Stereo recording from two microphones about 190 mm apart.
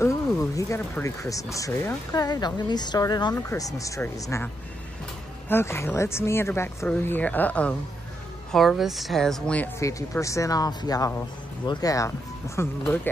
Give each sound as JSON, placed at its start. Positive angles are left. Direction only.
{"t": 0.0, "sound": "speech", "side_deg": 15}
{"t": 5.5, "sound": "speech", "side_deg": 15}